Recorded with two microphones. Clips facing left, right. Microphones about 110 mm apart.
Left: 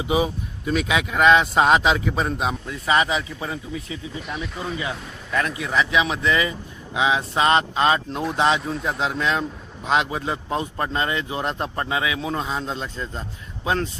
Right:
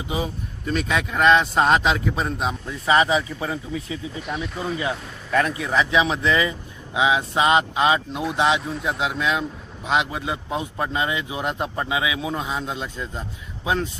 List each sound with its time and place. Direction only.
0.1 s speech: 10° left (ahead or behind)
2.8 s speech: 30° right (ahead or behind)
4.2 s speech: centre (ahead or behind)
4.8 s speech: 30° right (ahead or behind); by 13.2 s 10° right (ahead or behind)